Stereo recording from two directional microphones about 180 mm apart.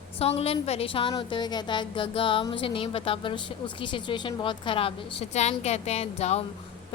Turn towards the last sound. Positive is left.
turn(degrees=35)  # may be behind; listen again after turning